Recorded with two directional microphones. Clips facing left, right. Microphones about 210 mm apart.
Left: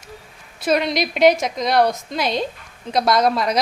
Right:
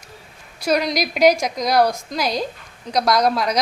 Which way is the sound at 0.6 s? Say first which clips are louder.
Left 1 dB; centre (ahead or behind).